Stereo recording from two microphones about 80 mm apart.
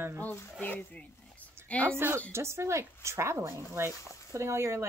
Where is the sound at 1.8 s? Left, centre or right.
Right.